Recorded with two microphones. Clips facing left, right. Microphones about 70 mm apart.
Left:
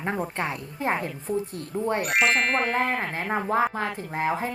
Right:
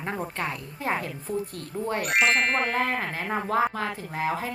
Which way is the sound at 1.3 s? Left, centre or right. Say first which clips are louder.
Left 2 dB; left.